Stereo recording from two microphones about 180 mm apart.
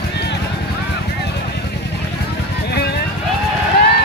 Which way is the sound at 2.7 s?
65° left (ahead or behind).